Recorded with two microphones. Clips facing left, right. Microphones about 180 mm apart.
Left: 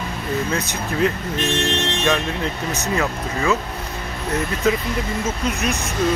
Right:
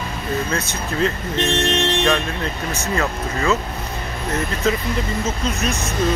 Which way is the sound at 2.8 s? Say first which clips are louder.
Even; 15° left (ahead or behind).